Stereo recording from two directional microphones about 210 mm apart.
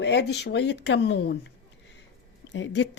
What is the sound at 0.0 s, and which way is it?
Speech, 55° left (ahead or behind).